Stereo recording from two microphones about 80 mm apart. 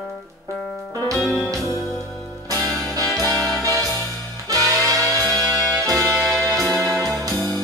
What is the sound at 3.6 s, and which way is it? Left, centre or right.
Music, right.